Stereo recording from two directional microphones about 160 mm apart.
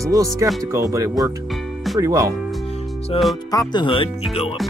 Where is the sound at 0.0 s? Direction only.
20° right (ahead or behind).